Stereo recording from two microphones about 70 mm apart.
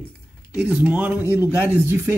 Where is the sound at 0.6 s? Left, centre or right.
Centre.